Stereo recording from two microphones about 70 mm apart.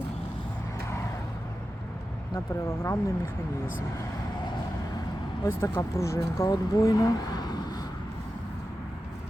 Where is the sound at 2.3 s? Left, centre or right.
Left.